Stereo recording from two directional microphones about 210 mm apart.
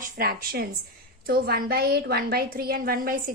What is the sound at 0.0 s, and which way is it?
A woman's voice, 45° right (ahead or behind).